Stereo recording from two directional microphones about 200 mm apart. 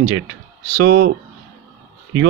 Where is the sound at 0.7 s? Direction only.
55° right (ahead or behind).